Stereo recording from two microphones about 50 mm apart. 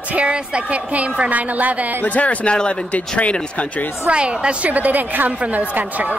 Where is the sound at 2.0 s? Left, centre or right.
Left.